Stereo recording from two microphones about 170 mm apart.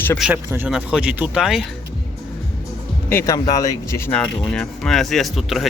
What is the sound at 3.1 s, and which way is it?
Speech, 15° left (ahead or behind).